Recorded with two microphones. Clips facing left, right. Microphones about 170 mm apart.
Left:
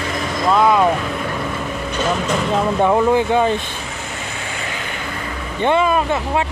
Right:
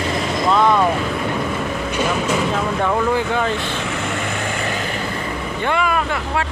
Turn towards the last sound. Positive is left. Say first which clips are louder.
# left 3 dB
turn(degrees=25)  # may be behind; listen again after turning